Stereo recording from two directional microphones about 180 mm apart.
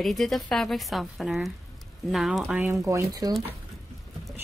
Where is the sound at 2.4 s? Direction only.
10° right (ahead or behind).